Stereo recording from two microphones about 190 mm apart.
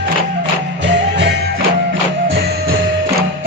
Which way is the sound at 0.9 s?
65° right (ahead or behind).